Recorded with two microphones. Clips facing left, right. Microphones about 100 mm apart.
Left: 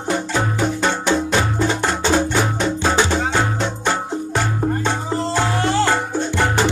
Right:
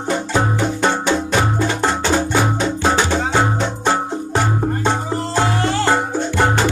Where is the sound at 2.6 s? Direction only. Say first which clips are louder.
Right 2 dB; 15° right (ahead or behind).